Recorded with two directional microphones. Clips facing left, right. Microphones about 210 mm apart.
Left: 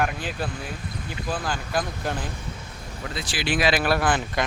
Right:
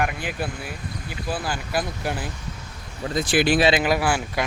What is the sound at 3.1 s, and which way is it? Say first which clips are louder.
Speech: right 9 dB; 50° right (ahead or behind).